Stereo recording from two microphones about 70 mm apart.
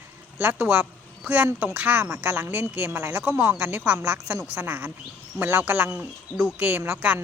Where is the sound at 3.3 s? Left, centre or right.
Right.